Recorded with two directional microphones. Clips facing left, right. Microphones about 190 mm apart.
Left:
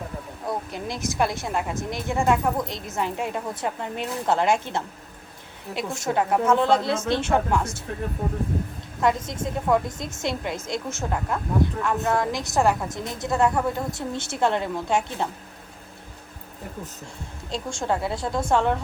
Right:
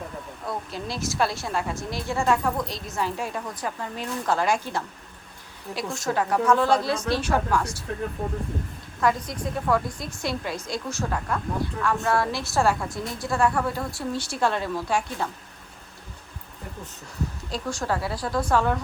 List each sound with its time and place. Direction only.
0.4 s a woman's voice: 20° left (ahead or behind)
9.0 s a woman's voice: 20° left (ahead or behind)
17.5 s a woman's voice: 25° left (ahead or behind)